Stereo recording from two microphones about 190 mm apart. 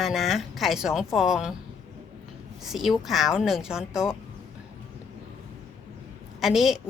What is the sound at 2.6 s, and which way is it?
A woman's voice, centre (ahead or behind).